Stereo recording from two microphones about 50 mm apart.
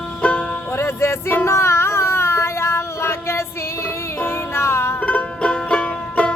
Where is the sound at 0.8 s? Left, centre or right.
Left.